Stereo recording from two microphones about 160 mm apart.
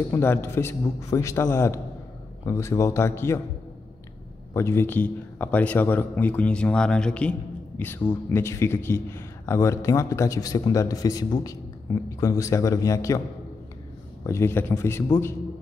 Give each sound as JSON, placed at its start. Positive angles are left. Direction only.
{"t": 0.1, "sound": "a man's voice", "side_deg": 15}
{"t": 4.6, "sound": "a man's voice", "side_deg": 15}
{"t": 14.2, "sound": "a man's voice", "side_deg": 15}